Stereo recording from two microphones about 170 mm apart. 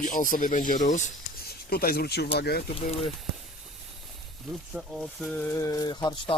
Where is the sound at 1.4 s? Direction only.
65° left (ahead or behind).